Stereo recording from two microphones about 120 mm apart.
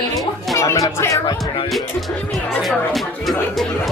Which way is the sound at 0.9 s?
25° left (ahead or behind).